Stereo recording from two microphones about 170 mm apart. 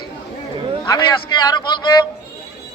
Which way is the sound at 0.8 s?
25° left (ahead or behind).